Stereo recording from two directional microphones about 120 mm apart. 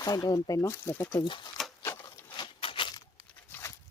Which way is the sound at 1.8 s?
20° left (ahead or behind).